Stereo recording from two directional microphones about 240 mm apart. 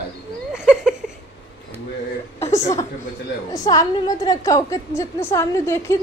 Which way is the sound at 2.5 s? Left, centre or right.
Centre.